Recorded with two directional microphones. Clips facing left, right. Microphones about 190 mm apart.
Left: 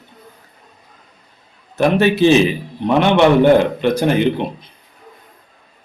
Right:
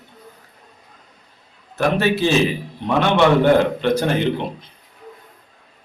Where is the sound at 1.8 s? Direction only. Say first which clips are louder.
Left 5 dB; 20° left (ahead or behind).